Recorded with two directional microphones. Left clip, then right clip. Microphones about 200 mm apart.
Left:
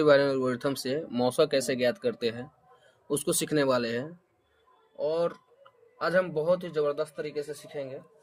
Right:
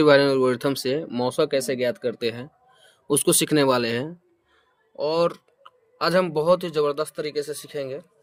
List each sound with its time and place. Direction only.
0.0 s speech: 40° right (ahead or behind)
4.9 s speech: 55° right (ahead or behind)